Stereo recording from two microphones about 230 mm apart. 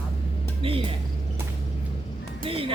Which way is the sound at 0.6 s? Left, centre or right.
Right.